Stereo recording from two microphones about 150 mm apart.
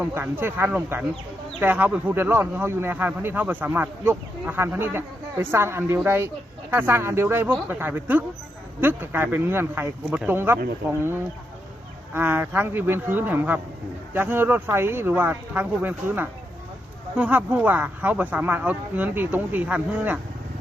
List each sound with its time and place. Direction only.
0.0 s speech: 15° right (ahead or behind)
12.1 s speech: 15° right (ahead or behind)